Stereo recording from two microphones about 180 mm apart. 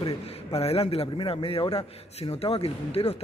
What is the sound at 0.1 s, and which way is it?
A man's voice, 35° left (ahead or behind).